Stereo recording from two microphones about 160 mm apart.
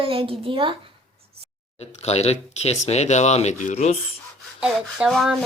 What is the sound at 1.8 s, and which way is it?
Speech, 40° left (ahead or behind).